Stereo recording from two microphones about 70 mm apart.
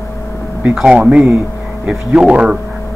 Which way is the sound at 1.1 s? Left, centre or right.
Centre.